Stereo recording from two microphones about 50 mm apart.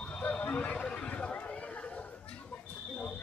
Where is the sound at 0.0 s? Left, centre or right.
Left.